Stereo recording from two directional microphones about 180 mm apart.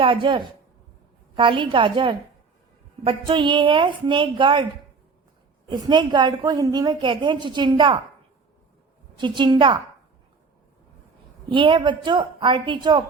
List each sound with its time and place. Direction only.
0.0 s a woman's voice: 30° right (ahead or behind)
5.6 s a woman's voice: 25° right (ahead or behind)
9.1 s a woman's voice: 25° right (ahead or behind)
11.4 s a woman's voice: 30° right (ahead or behind)